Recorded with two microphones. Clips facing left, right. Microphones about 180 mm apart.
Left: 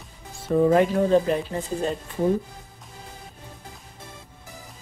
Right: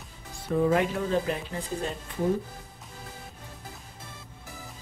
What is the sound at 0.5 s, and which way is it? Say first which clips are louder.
Speech: left 6 dB; 35° left (ahead or behind).